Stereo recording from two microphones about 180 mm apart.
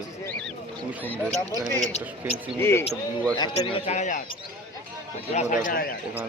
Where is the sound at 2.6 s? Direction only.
15° left (ahead or behind).